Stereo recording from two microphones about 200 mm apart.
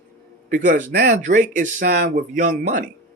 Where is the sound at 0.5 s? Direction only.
40° right (ahead or behind).